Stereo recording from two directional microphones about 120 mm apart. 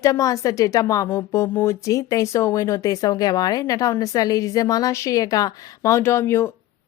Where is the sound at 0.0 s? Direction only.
30° left (ahead or behind).